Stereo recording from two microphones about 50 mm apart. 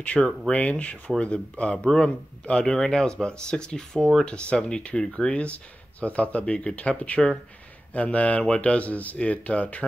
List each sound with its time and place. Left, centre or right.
0.2 s speech: centre
0.5 s speech: left
2.6 s speech: centre; by 9.8 s left